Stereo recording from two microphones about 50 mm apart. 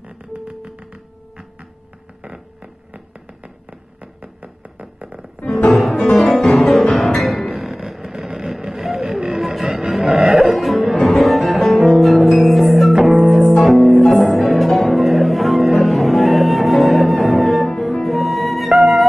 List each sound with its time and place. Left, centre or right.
2.2 s hum: right
4.0 s music: right
5.7 s music: centre